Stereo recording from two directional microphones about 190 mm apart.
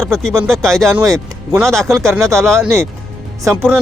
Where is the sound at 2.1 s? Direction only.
15° right (ahead or behind).